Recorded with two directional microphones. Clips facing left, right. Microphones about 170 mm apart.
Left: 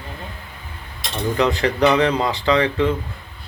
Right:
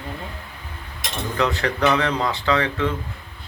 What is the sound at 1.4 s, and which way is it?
Speech, 15° left (ahead or behind).